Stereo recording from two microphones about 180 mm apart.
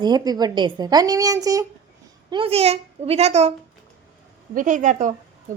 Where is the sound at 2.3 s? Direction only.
30° right (ahead or behind).